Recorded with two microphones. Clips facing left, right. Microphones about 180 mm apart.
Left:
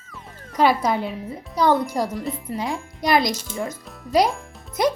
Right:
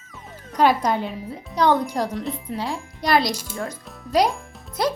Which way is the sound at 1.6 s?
15° right (ahead or behind).